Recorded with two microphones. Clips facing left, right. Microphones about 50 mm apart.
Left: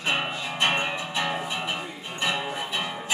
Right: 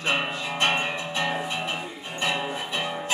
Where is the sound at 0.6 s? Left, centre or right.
Centre.